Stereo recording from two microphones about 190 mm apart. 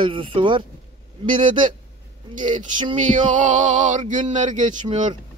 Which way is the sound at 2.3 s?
40° right (ahead or behind).